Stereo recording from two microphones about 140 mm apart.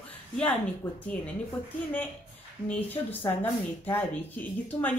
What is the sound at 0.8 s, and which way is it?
Speech, 15° left (ahead or behind).